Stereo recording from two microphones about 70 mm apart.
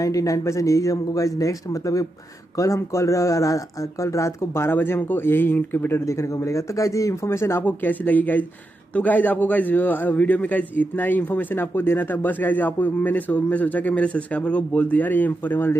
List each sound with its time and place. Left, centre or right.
0.0 s speech: left
6.0 s speech: left
7.2 s speech: left
7.6 s a man's voice: left